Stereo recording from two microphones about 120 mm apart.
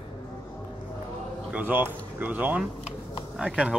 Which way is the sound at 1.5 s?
15° right (ahead or behind).